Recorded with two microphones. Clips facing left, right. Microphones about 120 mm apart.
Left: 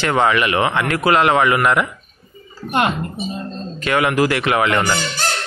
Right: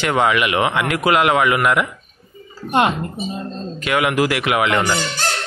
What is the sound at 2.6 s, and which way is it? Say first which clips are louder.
Speech: right 1 dB; 20° right (ahead or behind).